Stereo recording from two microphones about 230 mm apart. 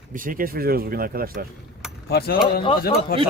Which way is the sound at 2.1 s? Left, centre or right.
Left.